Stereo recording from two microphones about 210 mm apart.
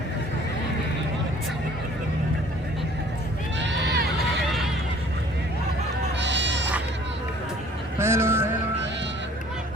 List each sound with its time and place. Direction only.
3.6 s run: 60° right (ahead or behind)
6.1 s sheep: 60° right (ahead or behind)
7.9 s a sound: 10° right (ahead or behind)